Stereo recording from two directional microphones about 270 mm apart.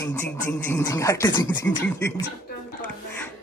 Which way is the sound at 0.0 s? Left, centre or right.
Centre.